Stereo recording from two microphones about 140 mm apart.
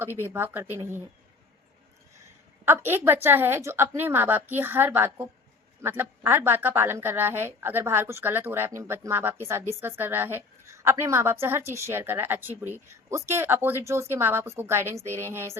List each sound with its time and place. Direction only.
0.3 s a woman's voice: 15° right (ahead or behind)
2.6 s a woman's voice: 15° right (ahead or behind)